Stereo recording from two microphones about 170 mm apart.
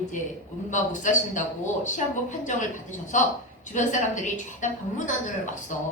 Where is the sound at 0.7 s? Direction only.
45° left (ahead or behind).